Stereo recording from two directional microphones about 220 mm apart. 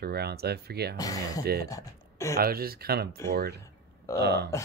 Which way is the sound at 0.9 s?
15° left (ahead or behind).